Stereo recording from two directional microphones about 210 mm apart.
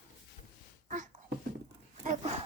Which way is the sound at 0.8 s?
35° right (ahead or behind).